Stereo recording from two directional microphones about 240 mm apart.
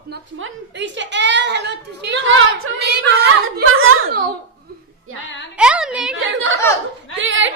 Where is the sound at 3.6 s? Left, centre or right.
Right.